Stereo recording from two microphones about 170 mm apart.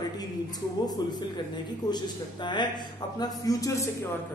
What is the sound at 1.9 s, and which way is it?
Speech, 25° left (ahead or behind).